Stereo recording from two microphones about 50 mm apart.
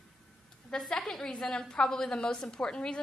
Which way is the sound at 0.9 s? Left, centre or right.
Centre.